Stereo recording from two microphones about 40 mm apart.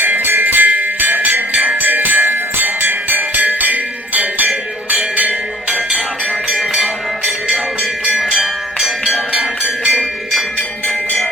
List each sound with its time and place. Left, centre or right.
0.0 s music: right
3.3 s music: right
6.6 s music: centre
7.4 s music: right